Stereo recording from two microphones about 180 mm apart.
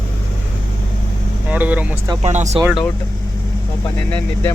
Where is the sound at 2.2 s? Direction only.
40° right (ahead or behind).